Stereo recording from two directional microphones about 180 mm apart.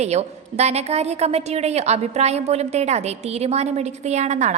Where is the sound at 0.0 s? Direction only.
35° right (ahead or behind).